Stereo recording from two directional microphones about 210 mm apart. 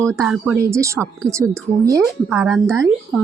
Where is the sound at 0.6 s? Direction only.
15° right (ahead or behind).